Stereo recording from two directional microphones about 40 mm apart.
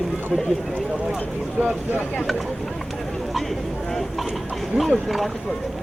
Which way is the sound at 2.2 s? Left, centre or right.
Centre.